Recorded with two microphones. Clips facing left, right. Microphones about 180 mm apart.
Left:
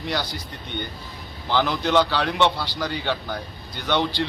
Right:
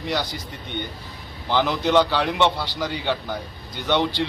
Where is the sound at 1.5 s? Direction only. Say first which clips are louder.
Right 1 dB; 15° right (ahead or behind).